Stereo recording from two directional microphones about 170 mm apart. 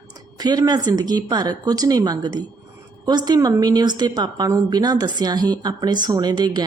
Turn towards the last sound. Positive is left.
turn(degrees=-25)  # may be behind; listen again after turning